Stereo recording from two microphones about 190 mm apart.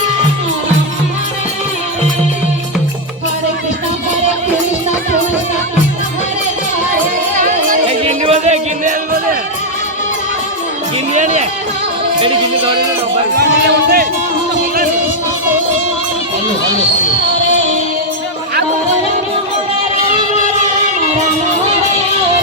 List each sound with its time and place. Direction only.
7.3 s music: 40° right (ahead or behind)
11.1 s speech: 40° right (ahead or behind)
13.3 s speech: 55° right (ahead or behind)
16.7 s speech: 40° left (ahead or behind)